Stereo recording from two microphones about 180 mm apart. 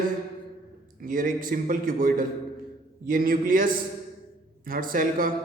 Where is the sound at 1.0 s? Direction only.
50° right (ahead or behind).